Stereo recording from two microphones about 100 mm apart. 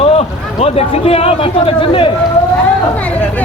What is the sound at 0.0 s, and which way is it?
Speech, 80° left.